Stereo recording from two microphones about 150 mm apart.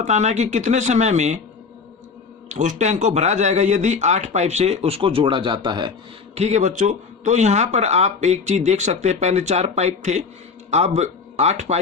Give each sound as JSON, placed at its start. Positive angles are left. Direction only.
{"t": 0.0, "sound": "speech", "side_deg": -50}
{"t": 2.5, "sound": "speech", "side_deg": -55}
{"t": 6.3, "sound": "speech", "side_deg": -45}